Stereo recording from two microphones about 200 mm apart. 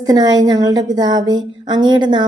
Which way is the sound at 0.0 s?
20° right (ahead or behind).